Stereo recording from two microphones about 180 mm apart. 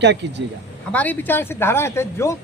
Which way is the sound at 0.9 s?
10° left (ahead or behind).